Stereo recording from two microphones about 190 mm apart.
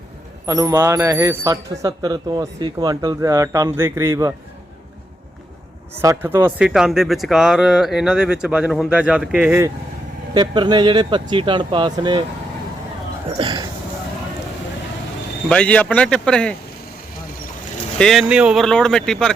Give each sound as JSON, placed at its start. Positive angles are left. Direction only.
{"t": 0.4, "sound": "a man's voice", "side_deg": -15}
{"t": 6.0, "sound": "speech", "side_deg": -15}
{"t": 10.3, "sound": "speech", "side_deg": -25}
{"t": 13.4, "sound": "a sound", "side_deg": -20}
{"t": 15.4, "sound": "speech", "side_deg": 5}
{"t": 17.9, "sound": "speech", "side_deg": 0}